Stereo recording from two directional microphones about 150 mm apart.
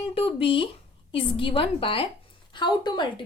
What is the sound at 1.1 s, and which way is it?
A woman's voice, 35° left (ahead or behind).